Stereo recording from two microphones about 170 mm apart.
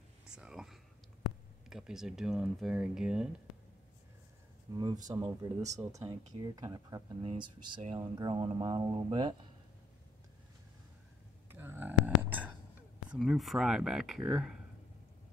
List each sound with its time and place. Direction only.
0.4 s whispering: centre (ahead or behind)
1.7 s speech: 5° right (ahead or behind)
4.7 s speech: 25° right (ahead or behind)
11.4 s a sound: 15° right (ahead or behind)
13.1 s speech: centre (ahead or behind)